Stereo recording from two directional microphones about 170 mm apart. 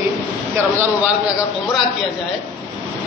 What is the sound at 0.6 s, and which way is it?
Speech, 15° right (ahead or behind).